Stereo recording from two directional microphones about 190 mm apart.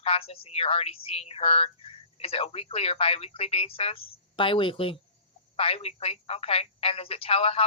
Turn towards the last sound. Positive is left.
turn(degrees=30)  # may be behind; listen again after turning